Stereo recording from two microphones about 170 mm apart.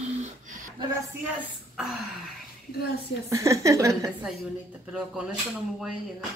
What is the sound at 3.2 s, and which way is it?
Speech, 15° right (ahead or behind).